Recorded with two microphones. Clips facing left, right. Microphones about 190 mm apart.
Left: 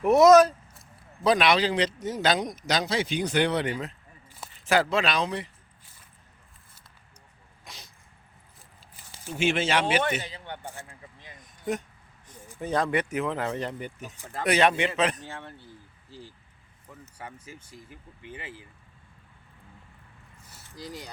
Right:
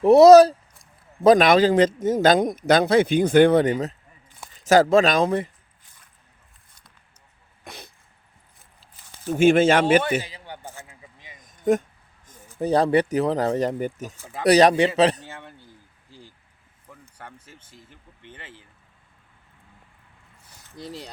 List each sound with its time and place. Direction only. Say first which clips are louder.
0.0 s speech: right 6 dB; 35° right (ahead or behind)
1.2 s speech: right 8 dB; 45° right (ahead or behind)
7.6 s dog: right 7 dB; 60° right (ahead or behind)
9.2 s speech: right 10 dB; 50° right (ahead or behind)
10.0 s a man's voice: right 3 dB; 10° right (ahead or behind)
12.5 s speech: right 7 dB; 35° right (ahead or behind)
15.3 s speech: even; centre (ahead or behind)
17.2 s speech: left 3 dB; 5° left (ahead or behind)